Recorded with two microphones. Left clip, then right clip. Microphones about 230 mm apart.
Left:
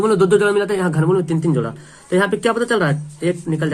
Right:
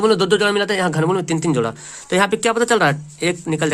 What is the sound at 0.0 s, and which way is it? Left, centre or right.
A man's voice, right.